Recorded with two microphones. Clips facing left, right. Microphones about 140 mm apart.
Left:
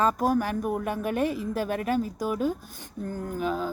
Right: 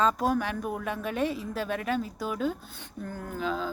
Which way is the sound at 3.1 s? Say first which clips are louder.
Left 3 dB; 15° left (ahead or behind).